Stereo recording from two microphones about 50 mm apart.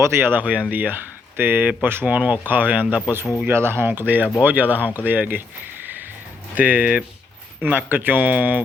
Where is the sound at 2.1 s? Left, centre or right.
Right.